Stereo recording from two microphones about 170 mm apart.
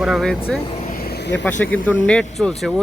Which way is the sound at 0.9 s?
60° left (ahead or behind).